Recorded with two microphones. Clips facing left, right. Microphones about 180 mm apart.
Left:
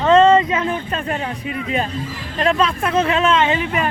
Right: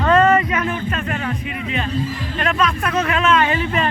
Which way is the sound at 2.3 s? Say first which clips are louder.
Left 3 dB; 30° left (ahead or behind).